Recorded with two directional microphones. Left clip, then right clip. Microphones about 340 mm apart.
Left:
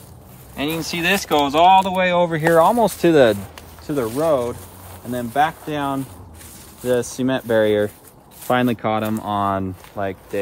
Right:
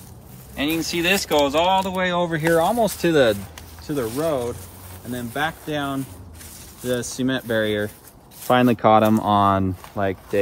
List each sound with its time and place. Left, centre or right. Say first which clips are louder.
0.6 s speech: even; centre
8.5 s speech: right 3 dB; centre